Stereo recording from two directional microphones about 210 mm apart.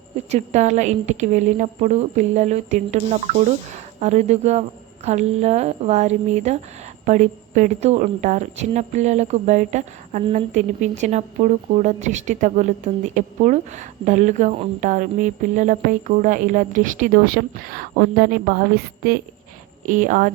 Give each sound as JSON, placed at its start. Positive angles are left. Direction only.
{"t": 0.3, "sound": "a woman's voice", "side_deg": -35}